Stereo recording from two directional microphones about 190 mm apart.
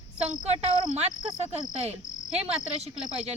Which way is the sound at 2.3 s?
5° right (ahead or behind).